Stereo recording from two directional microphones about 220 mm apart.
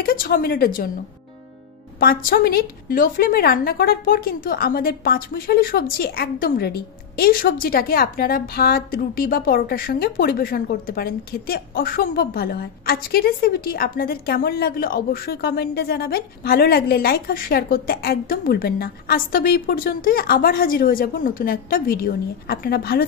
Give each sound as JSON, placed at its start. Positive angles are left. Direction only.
{"t": 0.0, "sound": "a woman's voice", "side_deg": 40}
{"t": 2.0, "sound": "a woman's voice", "side_deg": 45}